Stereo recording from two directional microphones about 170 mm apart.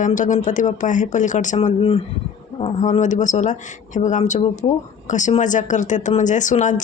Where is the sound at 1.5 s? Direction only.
35° left (ahead or behind).